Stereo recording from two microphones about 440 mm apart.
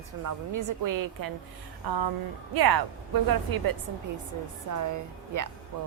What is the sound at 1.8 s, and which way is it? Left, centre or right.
Speech, right.